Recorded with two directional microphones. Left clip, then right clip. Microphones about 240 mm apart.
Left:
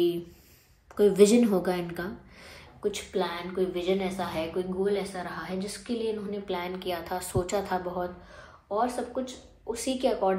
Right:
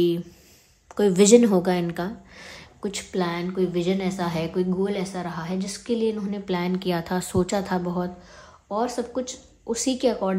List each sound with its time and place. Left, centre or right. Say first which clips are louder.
0.9 s speech: right 4 dB; right